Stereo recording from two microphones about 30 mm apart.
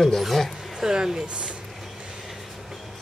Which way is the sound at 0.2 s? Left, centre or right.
Centre.